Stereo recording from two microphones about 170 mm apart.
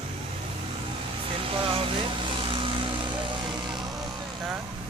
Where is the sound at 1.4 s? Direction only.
30° right (ahead or behind).